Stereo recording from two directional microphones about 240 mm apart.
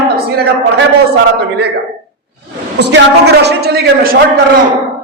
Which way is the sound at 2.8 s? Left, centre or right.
Right.